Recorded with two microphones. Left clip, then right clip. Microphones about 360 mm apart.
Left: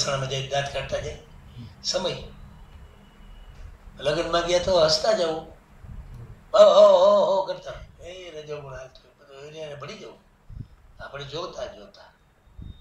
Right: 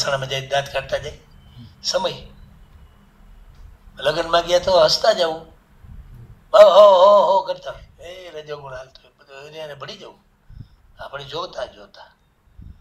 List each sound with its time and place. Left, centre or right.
0.0 s a man's voice: right
3.9 s a man's voice: right
6.5 s speech: right
11.1 s a man's voice: right